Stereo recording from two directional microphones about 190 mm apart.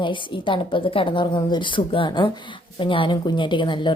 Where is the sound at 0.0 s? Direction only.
25° left (ahead or behind).